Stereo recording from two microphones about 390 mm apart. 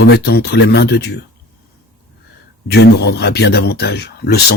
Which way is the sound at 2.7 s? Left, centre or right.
Left.